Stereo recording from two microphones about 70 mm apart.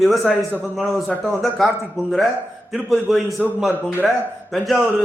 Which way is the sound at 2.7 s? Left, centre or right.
Centre.